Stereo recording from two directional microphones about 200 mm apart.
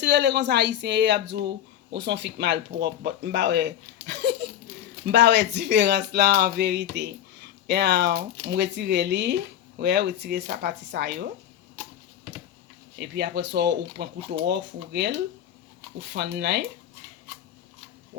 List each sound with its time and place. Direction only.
0.0 s speech: 60° right (ahead or behind)
13.0 s speech: 55° right (ahead or behind)